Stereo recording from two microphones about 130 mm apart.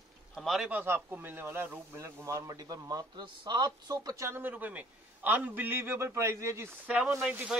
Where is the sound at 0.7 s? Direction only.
15° right (ahead or behind).